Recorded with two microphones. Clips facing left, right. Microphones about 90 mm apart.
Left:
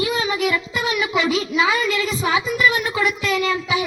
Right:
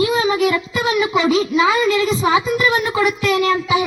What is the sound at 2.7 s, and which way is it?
Speech, 35° right (ahead or behind).